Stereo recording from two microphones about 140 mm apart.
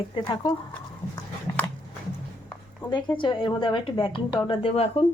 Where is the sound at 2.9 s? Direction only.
35° left (ahead or behind).